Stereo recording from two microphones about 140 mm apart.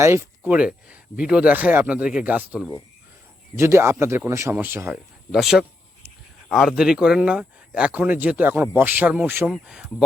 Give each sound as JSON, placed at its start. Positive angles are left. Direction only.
{"t": 0.0, "sound": "speech", "side_deg": -20}
{"t": 5.3, "sound": "speech", "side_deg": -5}
{"t": 9.5, "sound": "speech", "side_deg": -5}